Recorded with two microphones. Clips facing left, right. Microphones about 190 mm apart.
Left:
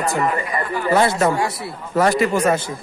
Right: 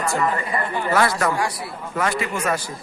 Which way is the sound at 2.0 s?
40° left (ahead or behind).